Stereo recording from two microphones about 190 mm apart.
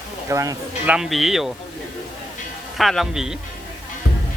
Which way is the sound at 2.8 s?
Centre (ahead or behind).